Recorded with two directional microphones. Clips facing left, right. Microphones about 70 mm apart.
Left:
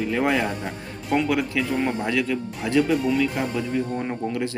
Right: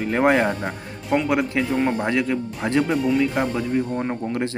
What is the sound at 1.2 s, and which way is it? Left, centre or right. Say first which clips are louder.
Speech: right 2 dB; right.